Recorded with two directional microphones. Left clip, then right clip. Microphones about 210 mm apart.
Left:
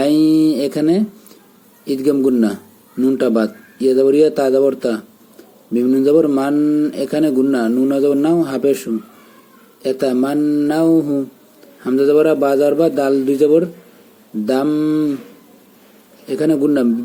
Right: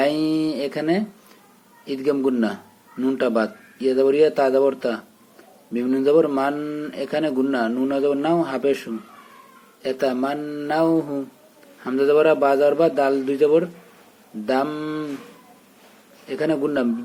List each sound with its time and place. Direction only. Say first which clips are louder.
0.0 s a sound: left 7 dB; 20° left (ahead or behind)
1.9 s speech: left 6 dB; 20° left (ahead or behind)
16.2 s speech: left 6 dB; 20° left (ahead or behind)